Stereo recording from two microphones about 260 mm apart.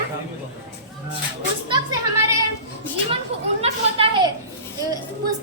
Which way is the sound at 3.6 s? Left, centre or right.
Right.